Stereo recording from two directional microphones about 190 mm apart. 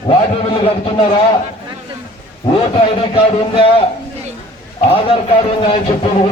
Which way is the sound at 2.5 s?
25° left (ahead or behind).